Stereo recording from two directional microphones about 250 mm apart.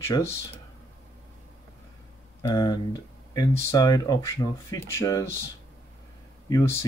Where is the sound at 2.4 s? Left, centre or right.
Centre.